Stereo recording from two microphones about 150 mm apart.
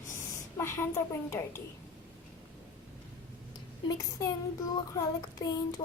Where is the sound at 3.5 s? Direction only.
25° left (ahead or behind).